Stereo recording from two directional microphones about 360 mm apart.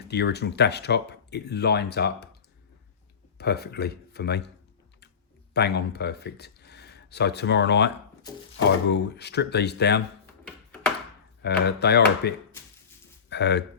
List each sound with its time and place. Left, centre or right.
0.0 s speech: left
3.3 s speech: left
5.5 s speech: left
8.9 s speech: left
11.4 s speech: left
13.3 s speech: left